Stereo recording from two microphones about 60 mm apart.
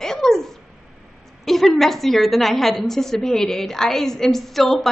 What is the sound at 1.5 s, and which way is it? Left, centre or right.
A woman's voice, centre.